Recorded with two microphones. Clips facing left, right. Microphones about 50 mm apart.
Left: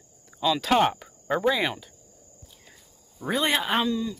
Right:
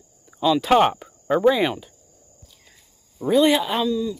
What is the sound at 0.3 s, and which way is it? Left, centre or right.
Speech, centre.